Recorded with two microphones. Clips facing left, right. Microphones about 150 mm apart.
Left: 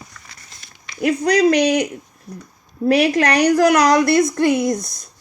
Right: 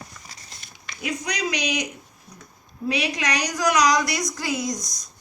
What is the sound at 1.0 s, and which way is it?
Speech, 60° left (ahead or behind).